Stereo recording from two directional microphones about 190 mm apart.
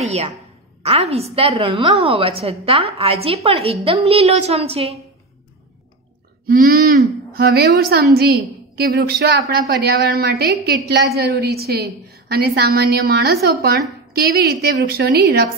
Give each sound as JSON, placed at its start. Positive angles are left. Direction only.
{"t": 0.0, "sound": "a woman's voice", "side_deg": -35}
{"t": 6.4, "sound": "a woman's voice", "side_deg": -50}